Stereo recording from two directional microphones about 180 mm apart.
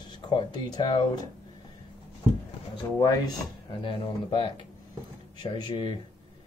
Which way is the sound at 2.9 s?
20° left (ahead or behind).